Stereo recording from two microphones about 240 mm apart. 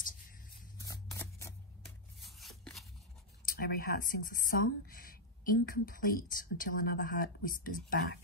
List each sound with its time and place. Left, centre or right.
0.7 s scissors: centre
2.1 s scissors: centre
3.4 s speech: left